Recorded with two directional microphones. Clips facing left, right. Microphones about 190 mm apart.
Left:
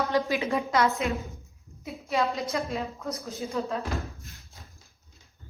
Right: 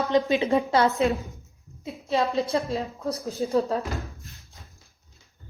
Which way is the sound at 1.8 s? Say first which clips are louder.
Right 2 dB; 30° right (ahead or behind).